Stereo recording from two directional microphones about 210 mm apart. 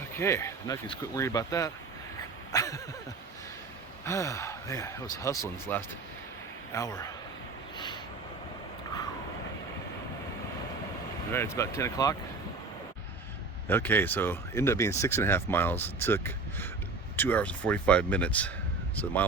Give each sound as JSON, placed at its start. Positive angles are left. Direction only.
{"t": 0.2, "sound": "speech", "side_deg": 10}
{"t": 2.5, "sound": "a sound", "side_deg": 15}
{"t": 4.0, "sound": "speech", "side_deg": 15}
{"t": 11.3, "sound": "speech", "side_deg": 10}
{"t": 13.7, "sound": "speech", "side_deg": 10}